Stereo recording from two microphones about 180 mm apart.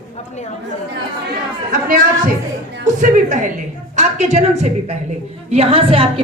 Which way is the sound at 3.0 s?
45° right (ahead or behind).